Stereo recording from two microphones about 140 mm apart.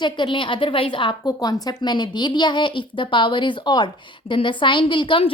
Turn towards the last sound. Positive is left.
turn(degrees=40)  # may be behind; listen again after turning